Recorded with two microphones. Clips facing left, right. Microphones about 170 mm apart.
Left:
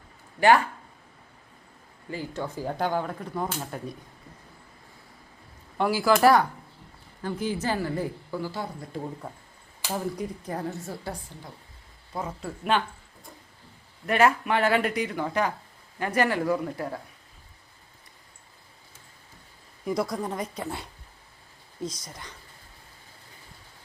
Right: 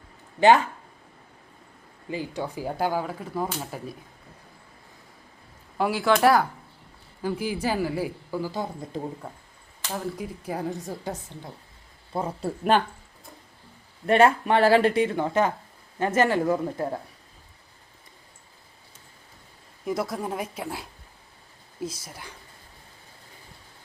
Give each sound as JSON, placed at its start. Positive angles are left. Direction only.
{"t": 0.3, "sound": "speech", "side_deg": -20}
{"t": 2.0, "sound": "speech", "side_deg": -15}
{"t": 5.7, "sound": "a woman's voice", "side_deg": 0}
{"t": 9.8, "sound": "speech", "side_deg": -5}
{"t": 14.1, "sound": "speech", "side_deg": -30}
{"t": 19.8, "sound": "a woman's voice", "side_deg": 0}